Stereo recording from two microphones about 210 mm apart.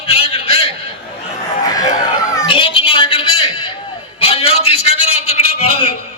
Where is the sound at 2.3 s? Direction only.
20° left (ahead or behind).